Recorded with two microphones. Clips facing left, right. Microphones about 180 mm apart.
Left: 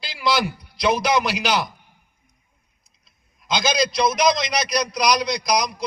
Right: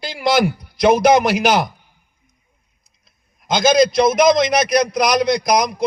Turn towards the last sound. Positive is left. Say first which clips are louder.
# right 5 dB
turn(degrees=-55)  # may be behind; listen again after turning